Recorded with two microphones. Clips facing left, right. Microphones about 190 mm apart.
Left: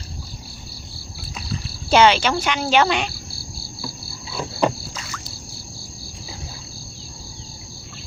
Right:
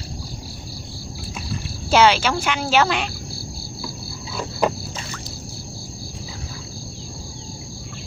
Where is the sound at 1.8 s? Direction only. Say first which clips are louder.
Left 1 dB; 5° right (ahead or behind).